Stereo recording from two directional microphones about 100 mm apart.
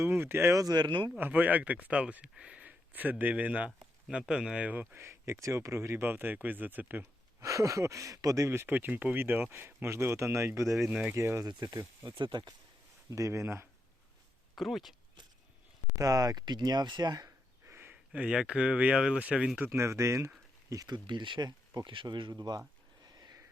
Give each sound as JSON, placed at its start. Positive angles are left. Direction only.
{"t": 0.0, "sound": "speech", "side_deg": -25}
{"t": 0.5, "sound": "speech", "side_deg": -40}
{"t": 1.2, "sound": "speech", "side_deg": -15}
{"t": 4.9, "sound": "speech", "side_deg": -30}
{"t": 7.4, "sound": "speech", "side_deg": -30}
{"t": 10.8, "sound": "speech", "side_deg": -15}
{"t": 11.1, "sound": "speech", "side_deg": -30}
{"t": 12.1, "sound": "speech", "side_deg": -50}
{"t": 13.1, "sound": "speech", "side_deg": -35}
{"t": 14.5, "sound": "speech", "side_deg": 0}
{"t": 16.0, "sound": "speech", "side_deg": -35}
{"t": 17.7, "sound": "speech", "side_deg": -20}
{"t": 19.5, "sound": "speech", "side_deg": -25}
{"t": 23.0, "sound": "a sound", "side_deg": -40}